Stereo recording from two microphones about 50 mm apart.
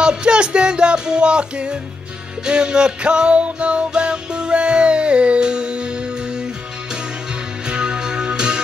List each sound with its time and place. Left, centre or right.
0.0 s music: centre
7.6 s music: centre